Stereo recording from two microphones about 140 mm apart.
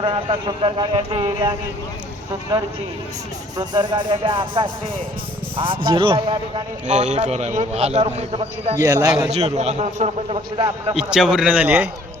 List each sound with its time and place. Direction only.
0.0 s a man's voice: 35° right (ahead or behind)
3.6 s a man's voice: 30° right (ahead or behind)
6.8 s a man's voice: 60° right (ahead or behind)
8.7 s a man's voice: 25° right (ahead or behind)
9.3 s a man's voice: 50° right (ahead or behind)
10.9 s a man's voice: 5° right (ahead or behind)